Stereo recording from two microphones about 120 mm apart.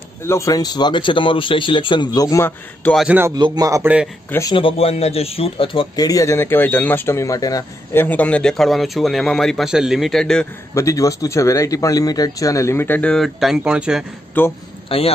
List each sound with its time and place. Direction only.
0.2 s speech: 20° left (ahead or behind)
0.6 s speech: 35° left (ahead or behind)
2.2 s speech: 25° left (ahead or behind)
3.1 s a man's voice: 15° right (ahead or behind)
3.3 s a man's voice: 35° right (ahead or behind)
3.8 s a man's voice: 10° right (ahead or behind)
4.5 s speech: 45° left (ahead or behind)
5.9 s speech: 30° left (ahead or behind)
7.9 s speech: 15° left (ahead or behind)
10.7 s speech: 25° left (ahead or behind)
13.1 s speech: centre (ahead or behind)
14.4 s speech: 15° left (ahead or behind)
14.9 s speech: 50° left (ahead or behind)